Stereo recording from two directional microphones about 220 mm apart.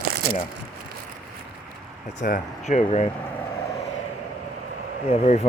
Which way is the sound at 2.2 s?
35° left (ahead or behind).